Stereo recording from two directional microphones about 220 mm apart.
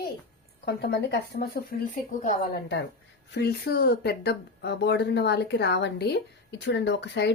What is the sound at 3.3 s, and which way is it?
Speech, 45° left (ahead or behind).